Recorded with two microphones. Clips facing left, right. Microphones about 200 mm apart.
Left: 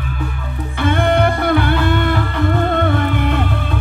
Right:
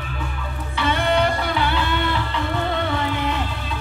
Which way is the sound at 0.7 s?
50° left (ahead or behind).